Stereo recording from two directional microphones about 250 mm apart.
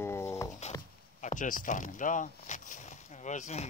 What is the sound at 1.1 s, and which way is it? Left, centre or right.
Speech, left.